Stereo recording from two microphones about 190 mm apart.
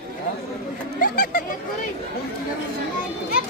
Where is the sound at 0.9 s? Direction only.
50° left (ahead or behind).